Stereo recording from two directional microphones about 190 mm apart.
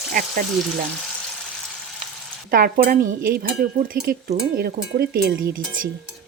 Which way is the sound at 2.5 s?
50° right (ahead or behind).